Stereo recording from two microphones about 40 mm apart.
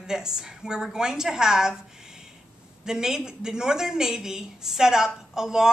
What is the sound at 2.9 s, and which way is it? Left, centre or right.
A woman's voice, centre.